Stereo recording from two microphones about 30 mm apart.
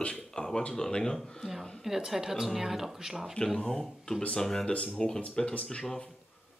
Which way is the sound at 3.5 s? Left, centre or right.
Centre.